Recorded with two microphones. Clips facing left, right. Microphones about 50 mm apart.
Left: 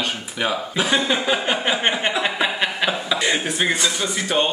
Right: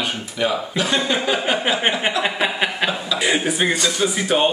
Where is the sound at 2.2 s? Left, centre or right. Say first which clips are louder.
Right 1 dB; centre.